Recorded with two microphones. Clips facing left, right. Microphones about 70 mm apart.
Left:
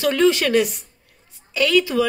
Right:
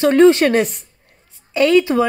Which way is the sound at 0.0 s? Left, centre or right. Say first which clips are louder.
Right 7 dB; right.